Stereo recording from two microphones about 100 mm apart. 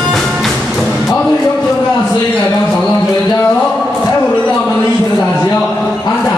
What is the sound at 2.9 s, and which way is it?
Music, 30° left (ahead or behind).